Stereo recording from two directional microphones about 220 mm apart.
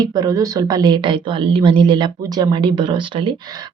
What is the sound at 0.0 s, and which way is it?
A woman's voice, 15° right (ahead or behind).